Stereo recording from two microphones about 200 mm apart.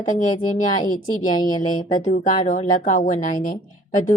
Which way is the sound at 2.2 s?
40° left (ahead or behind).